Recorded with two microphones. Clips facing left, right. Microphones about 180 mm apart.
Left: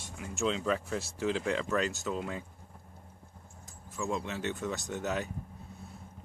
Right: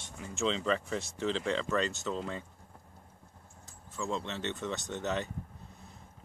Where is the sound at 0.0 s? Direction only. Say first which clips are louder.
Left 1 dB; 10° left (ahead or behind).